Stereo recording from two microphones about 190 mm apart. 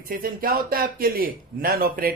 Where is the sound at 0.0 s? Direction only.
50° right (ahead or behind).